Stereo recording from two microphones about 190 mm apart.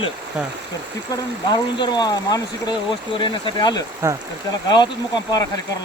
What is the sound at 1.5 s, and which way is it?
Speech, 20° left (ahead or behind).